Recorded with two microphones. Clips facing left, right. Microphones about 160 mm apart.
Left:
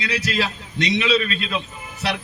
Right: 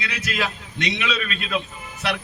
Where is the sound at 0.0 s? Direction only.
30° left (ahead or behind).